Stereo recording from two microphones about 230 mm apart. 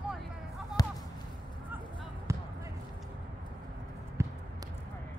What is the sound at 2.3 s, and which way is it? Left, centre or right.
Basketball bounce, centre.